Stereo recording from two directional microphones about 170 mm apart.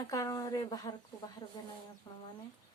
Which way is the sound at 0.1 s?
20° left (ahead or behind).